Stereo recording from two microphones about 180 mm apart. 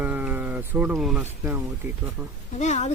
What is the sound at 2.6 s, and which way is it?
Speech, 40° left (ahead or behind).